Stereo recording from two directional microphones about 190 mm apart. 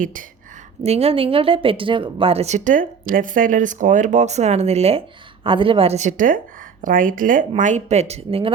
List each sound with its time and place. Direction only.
0.0 s speech: 45° right (ahead or behind)
0.8 s speech: 35° right (ahead or behind)